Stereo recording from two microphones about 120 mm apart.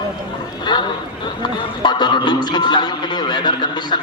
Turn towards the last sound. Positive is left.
turn(degrees=35)  # may be behind; listen again after turning